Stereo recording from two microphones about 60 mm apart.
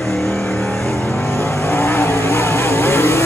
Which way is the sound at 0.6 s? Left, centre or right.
Centre.